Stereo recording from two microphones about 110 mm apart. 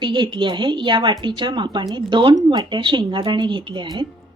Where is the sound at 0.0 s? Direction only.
45° right (ahead or behind).